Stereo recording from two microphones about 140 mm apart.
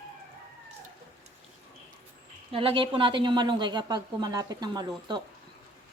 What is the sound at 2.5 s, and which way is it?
A woman's voice, 40° right (ahead or behind).